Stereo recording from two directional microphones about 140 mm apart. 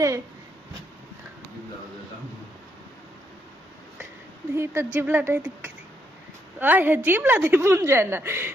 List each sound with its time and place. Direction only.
4.5 s a woman's voice: 20° right (ahead or behind)
6.6 s a woman's voice: 15° right (ahead or behind)